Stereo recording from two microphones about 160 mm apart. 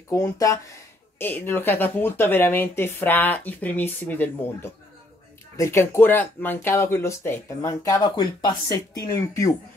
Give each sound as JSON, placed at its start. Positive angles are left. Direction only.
{"t": 0.1, "sound": "speech", "side_deg": 20}